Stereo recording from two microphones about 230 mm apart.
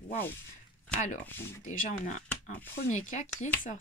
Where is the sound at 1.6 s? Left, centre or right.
Left.